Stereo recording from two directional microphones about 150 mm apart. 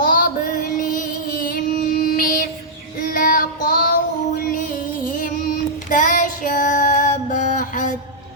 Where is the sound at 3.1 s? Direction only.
70° left (ahead or behind).